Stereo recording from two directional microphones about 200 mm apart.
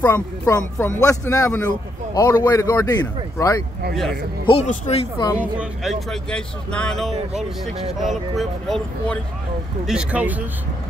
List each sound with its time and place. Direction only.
0.0 s speech: 15° left (ahead or behind)
3.9 s speech: centre (ahead or behind)
4.5 s speech: 35° left (ahead or behind)
5.4 s speech: 5° right (ahead or behind)